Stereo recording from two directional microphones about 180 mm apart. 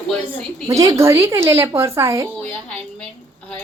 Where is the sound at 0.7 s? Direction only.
15° right (ahead or behind).